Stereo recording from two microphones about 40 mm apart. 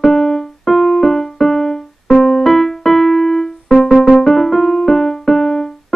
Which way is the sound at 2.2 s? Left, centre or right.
Centre.